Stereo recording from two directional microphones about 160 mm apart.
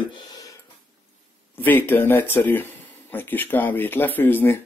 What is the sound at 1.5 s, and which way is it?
Speech, 10° left (ahead or behind).